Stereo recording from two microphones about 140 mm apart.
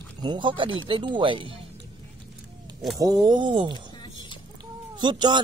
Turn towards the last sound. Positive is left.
turn(degrees=-35)  # may be behind; listen again after turning